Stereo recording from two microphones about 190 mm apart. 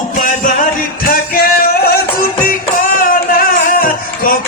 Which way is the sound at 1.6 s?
50° left (ahead or behind).